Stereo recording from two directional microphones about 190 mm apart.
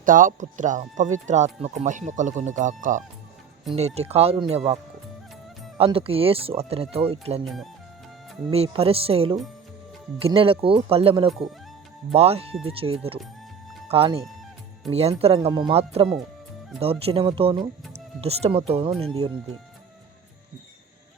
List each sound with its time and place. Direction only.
0.0 s speech: 45° right (ahead or behind)
7.4 s speech: centre (ahead or behind)
8.4 s speech: 30° right (ahead or behind)